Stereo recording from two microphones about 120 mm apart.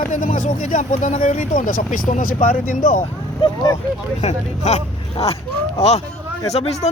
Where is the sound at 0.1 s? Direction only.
90° left.